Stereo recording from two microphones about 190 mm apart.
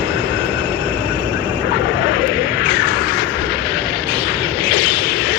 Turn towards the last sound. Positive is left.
turn(degrees=60)  # may be behind; listen again after turning